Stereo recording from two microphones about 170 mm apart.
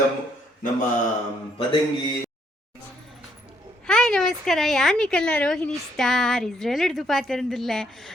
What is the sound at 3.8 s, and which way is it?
A woman's voice, 5° left (ahead or behind).